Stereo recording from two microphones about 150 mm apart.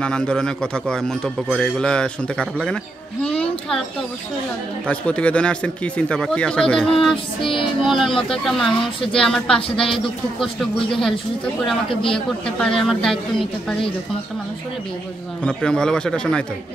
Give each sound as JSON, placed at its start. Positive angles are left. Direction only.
{"t": 0.0, "sound": "a man's voice", "side_deg": 5}
{"t": 4.8, "sound": "a man's voice", "side_deg": 10}
{"t": 8.1, "sound": "speech", "side_deg": 35}
{"t": 8.5, "sound": "a man's voice", "side_deg": 0}
{"t": 15.4, "sound": "a man's voice", "side_deg": 5}